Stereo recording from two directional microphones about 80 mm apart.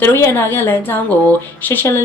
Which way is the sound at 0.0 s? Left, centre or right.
Left.